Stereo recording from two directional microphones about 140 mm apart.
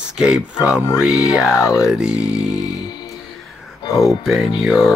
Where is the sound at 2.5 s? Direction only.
30° left (ahead or behind).